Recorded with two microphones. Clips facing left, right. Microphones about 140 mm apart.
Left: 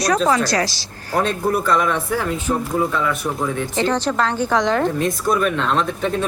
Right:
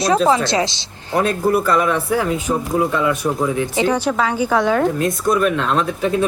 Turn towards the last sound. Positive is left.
turn(degrees=-5)  # may be behind; listen again after turning